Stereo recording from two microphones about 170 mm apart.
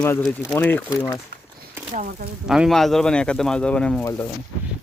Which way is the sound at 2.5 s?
Centre (ahead or behind).